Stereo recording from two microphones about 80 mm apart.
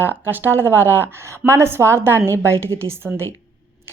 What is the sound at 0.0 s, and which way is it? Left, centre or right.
A woman's voice, right.